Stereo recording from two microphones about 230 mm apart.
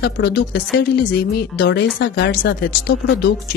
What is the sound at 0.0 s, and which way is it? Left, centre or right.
Speech, left.